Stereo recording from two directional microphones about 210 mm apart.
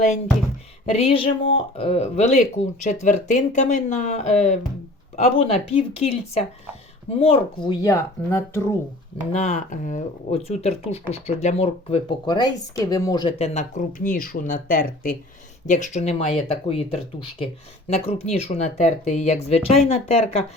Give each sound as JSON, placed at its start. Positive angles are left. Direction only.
{"t": 0.9, "sound": "speech", "side_deg": 25}
{"t": 9.3, "sound": "speech", "side_deg": 35}